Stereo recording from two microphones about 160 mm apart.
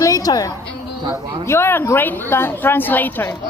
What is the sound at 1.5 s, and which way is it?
A woman's voice, 15° left (ahead or behind).